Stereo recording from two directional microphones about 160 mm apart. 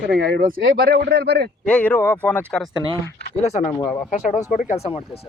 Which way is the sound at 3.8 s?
20° left (ahead or behind).